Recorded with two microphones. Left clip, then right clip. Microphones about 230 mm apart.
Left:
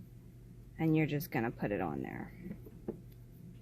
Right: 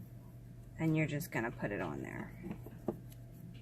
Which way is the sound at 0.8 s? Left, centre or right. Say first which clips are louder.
Left 3 dB; left.